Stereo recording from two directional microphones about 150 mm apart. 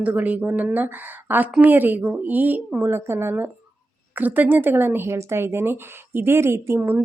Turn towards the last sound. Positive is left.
turn(degrees=-15)  # may be behind; listen again after turning